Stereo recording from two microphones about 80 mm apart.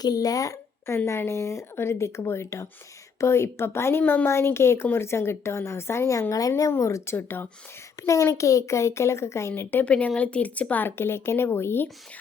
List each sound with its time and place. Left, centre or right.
0.0 s speech: left
0.9 s speech: left
4.0 s speech: left
8.0 s speech: left
9.8 s speech: centre